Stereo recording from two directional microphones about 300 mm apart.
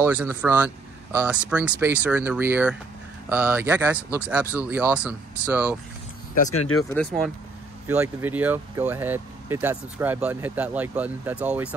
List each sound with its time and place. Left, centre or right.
0.0 s speech: centre
6.5 s speech: left
6.8 s speech: centre